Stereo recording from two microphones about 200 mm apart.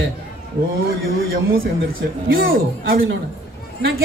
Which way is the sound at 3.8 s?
50° right (ahead or behind).